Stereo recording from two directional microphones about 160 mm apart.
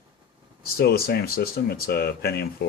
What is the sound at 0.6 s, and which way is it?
Speech, 75° left (ahead or behind).